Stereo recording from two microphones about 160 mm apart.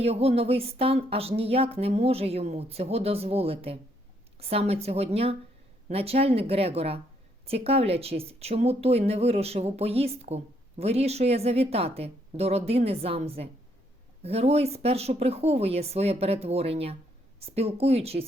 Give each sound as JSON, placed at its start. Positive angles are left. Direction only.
{"t": 0.0, "sound": "speech", "side_deg": -40}